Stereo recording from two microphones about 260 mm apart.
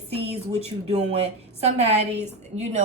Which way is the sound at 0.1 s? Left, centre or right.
Right.